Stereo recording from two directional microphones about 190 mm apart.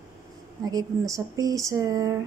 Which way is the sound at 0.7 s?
20° right (ahead or behind).